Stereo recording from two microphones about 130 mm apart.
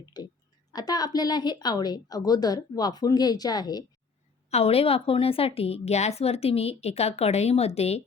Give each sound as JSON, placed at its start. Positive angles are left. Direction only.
{"t": 0.1, "sound": "a woman's voice", "side_deg": 35}
{"t": 4.5, "sound": "a woman's voice", "side_deg": 50}